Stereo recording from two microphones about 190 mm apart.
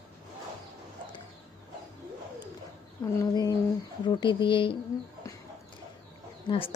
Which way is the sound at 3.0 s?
20° left (ahead or behind).